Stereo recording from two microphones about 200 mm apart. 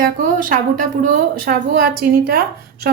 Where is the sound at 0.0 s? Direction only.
45° right (ahead or behind).